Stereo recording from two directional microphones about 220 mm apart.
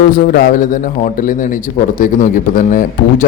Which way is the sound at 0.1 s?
40° left (ahead or behind).